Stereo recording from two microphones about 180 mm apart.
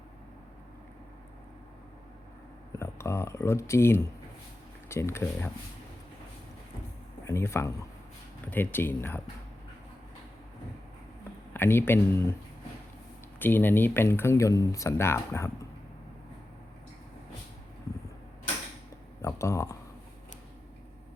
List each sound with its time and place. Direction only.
2.7 s speech: 15° left (ahead or behind)
7.3 s speech: 15° left (ahead or behind)
11.5 s speech: 10° left (ahead or behind)
13.4 s speech: 10° left (ahead or behind)
19.2 s speech: 15° left (ahead or behind)